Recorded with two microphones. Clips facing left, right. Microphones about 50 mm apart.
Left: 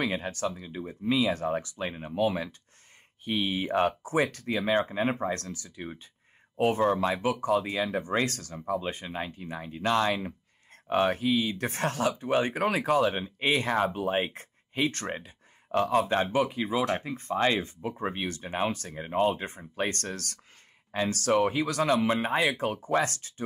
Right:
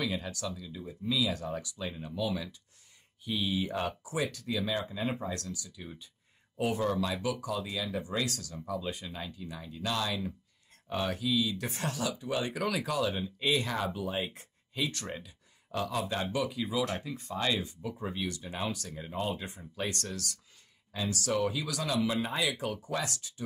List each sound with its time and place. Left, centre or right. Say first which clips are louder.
0.0 s speech: left 5 dB; left